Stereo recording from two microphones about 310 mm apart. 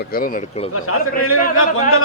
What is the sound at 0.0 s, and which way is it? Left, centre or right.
Speech, left.